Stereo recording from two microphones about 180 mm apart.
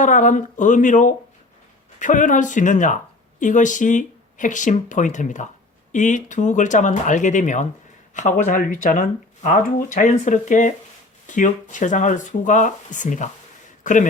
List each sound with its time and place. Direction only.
0.0 s speech: 45° left (ahead or behind)